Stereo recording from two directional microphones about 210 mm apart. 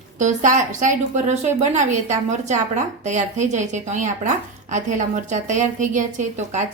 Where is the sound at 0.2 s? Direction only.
35° right (ahead or behind).